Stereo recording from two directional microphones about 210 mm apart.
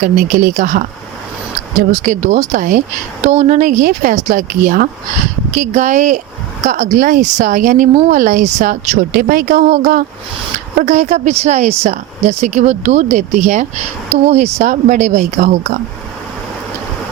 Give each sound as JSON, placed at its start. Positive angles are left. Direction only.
{"t": 0.0, "sound": "speech", "side_deg": -40}
{"t": 1.9, "sound": "speech", "side_deg": -35}